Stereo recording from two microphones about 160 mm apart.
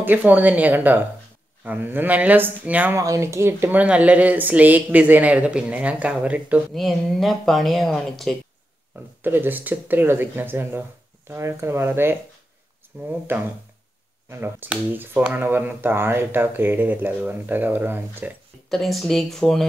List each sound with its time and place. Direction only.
0.0 s speech: 10° right (ahead or behind)
8.9 s speech: 10° right (ahead or behind)
13.3 s speech: 15° right (ahead or behind)
18.7 s speech: centre (ahead or behind)